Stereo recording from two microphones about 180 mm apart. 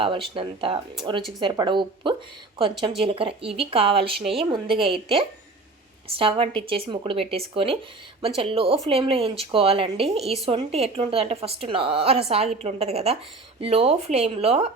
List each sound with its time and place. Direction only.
0.3 s a woman's voice: 30° right (ahead or behind)